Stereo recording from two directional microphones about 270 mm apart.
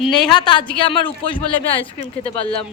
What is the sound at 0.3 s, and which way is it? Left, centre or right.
A woman's voice, centre.